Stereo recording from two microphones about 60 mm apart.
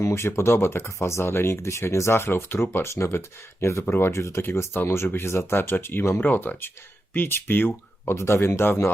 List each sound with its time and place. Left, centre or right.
0.0 s speech: left
4.2 s speech: left
4.4 s speech: left
8.1 s speech: left